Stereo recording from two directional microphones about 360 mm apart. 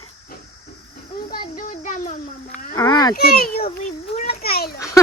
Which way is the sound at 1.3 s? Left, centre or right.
Left.